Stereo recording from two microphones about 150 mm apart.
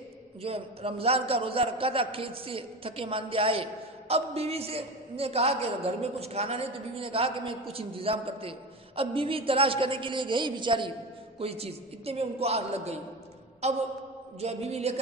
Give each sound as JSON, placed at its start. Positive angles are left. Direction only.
{"t": 0.4, "sound": "a man's voice", "side_deg": -40}